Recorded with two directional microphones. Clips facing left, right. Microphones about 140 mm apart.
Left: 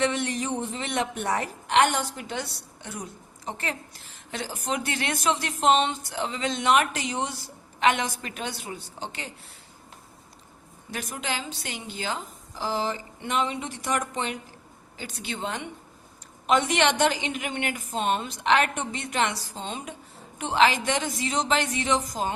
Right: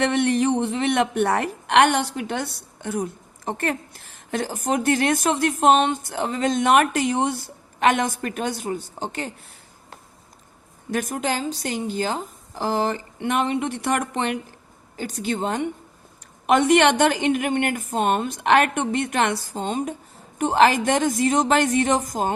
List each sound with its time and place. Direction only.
0.0 s a woman's voice: 60° right (ahead or behind)
10.9 s a woman's voice: 50° right (ahead or behind)
14.9 s a woman's voice: 45° right (ahead or behind)